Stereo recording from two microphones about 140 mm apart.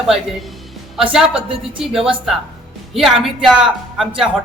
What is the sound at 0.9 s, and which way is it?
Speech, 5° right (ahead or behind).